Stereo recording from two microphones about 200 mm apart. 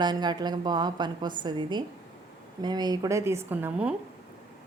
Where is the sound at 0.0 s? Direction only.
20° right (ahead or behind).